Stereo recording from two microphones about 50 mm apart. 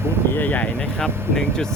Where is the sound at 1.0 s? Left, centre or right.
Centre.